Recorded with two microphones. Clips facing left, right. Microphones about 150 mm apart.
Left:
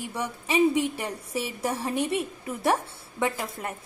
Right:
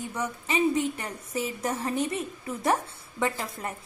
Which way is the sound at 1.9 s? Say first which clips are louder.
Left 3 dB; 70° left (ahead or behind).